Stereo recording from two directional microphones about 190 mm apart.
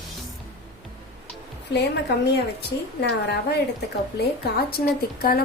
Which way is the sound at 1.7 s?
60° left (ahead or behind).